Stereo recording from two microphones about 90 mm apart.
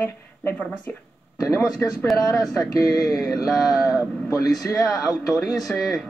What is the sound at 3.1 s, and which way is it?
Speech, 5° right (ahead or behind).